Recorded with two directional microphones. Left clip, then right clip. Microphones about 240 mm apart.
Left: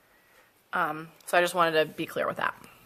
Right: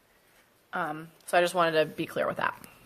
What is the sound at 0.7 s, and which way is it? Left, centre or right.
Speech, left.